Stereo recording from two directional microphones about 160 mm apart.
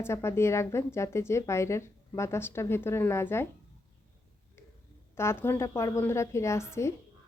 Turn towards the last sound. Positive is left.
turn(degrees=15)  # may be behind; listen again after turning